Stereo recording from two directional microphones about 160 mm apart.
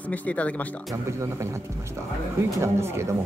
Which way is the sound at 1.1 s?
15° right (ahead or behind).